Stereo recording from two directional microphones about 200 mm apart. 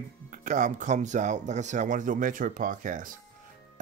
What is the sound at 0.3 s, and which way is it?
Speech, 40° right (ahead or behind).